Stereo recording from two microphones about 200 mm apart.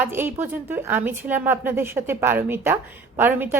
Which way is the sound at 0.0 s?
10° right (ahead or behind).